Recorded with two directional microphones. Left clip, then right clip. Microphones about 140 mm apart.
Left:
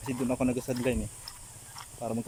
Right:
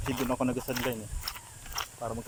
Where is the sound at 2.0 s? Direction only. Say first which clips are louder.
Left 7 dB; 15° left (ahead or behind).